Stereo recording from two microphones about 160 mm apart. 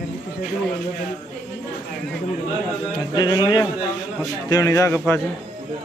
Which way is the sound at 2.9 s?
25° left (ahead or behind).